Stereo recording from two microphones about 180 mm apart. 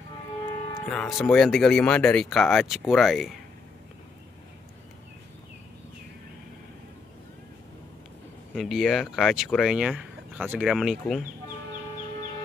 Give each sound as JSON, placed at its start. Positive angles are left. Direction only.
{"t": 0.5, "sound": "music", "side_deg": 30}
{"t": 0.8, "sound": "speech", "side_deg": 0}
{"t": 8.5, "sound": "speech", "side_deg": 0}